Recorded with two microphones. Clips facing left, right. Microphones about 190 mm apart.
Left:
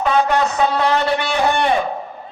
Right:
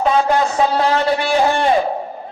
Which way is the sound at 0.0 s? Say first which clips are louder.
Right 1 dB; 30° right (ahead or behind).